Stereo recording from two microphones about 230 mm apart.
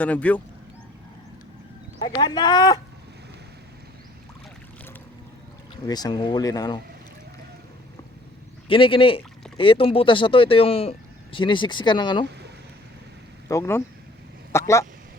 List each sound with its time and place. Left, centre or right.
0.0 s speech: centre
2.0 s speech: left
5.8 s speech: centre
8.6 s speech: left
13.5 s speech: centre